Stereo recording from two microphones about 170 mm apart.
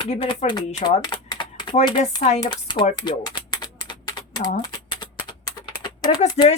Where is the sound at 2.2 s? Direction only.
40° left (ahead or behind).